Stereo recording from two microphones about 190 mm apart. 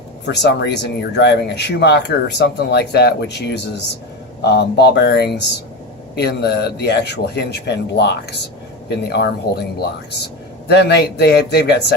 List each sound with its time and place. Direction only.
0.3 s speech: 60° left (ahead or behind)
10.7 s speech: 60° left (ahead or behind)